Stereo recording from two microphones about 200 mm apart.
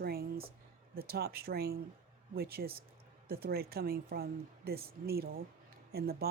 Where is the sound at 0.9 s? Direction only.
50° right (ahead or behind).